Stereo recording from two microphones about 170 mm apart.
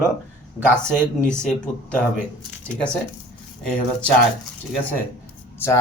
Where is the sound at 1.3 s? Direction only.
5° left (ahead or behind).